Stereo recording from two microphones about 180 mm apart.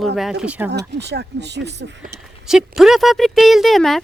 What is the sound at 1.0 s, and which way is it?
Speech, 70° right (ahead or behind).